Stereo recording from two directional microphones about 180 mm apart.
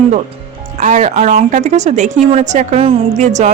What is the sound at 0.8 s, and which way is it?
A woman's voice, 40° right (ahead or behind).